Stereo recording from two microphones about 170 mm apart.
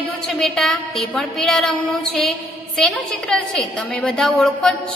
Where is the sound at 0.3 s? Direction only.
Centre (ahead or behind).